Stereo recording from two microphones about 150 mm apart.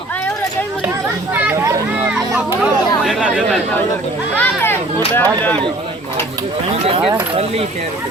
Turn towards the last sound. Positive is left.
turn(degrees=-40)  # may be behind; listen again after turning